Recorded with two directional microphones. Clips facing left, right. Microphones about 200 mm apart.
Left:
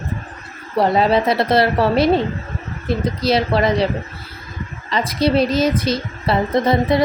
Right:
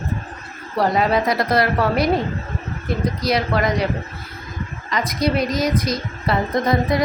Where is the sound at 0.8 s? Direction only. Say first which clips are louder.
Left 3 dB; 30° left (ahead or behind).